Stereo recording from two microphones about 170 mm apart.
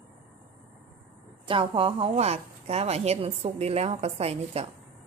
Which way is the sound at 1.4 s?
30° right (ahead or behind).